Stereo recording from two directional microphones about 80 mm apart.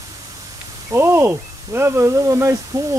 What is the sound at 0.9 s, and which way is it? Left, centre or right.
Speech, right.